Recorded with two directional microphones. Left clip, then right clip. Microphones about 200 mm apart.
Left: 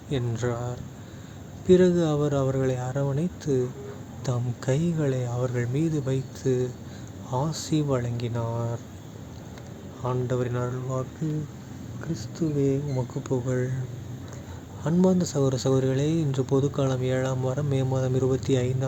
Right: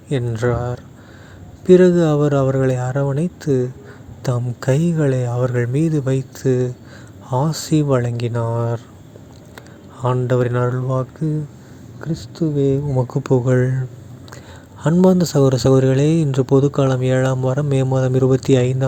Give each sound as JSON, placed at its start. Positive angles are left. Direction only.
{"t": 0.1, "sound": "speech", "side_deg": -35}
{"t": 10.0, "sound": "speech", "side_deg": -40}
{"t": 14.9, "sound": "speech", "side_deg": -40}